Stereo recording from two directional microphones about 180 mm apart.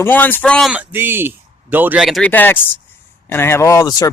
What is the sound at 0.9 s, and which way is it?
Speech, 10° right (ahead or behind).